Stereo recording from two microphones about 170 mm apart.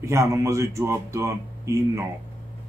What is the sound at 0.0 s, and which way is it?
A man's voice, 15° right (ahead or behind).